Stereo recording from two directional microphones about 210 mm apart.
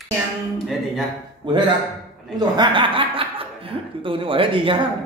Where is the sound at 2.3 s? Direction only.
20° right (ahead or behind).